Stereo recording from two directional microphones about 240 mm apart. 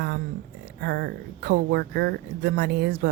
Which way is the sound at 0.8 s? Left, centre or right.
Right.